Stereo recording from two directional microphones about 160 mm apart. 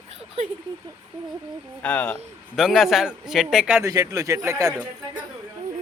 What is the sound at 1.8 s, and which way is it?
A man's voice, 10° left (ahead or behind).